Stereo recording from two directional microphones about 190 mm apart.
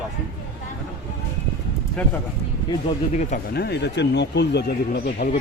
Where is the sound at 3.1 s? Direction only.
40° left (ahead or behind).